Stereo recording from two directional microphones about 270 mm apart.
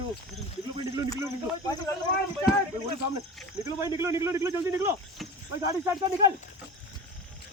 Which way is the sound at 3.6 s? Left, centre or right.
Centre.